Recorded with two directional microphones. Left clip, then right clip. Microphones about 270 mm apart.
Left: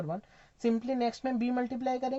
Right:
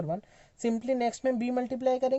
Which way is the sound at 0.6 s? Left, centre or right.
Right.